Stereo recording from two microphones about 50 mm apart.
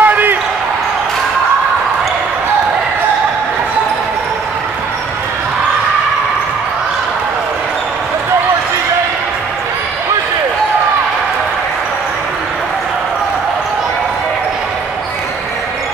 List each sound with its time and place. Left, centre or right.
0.0 s basketball bounce: right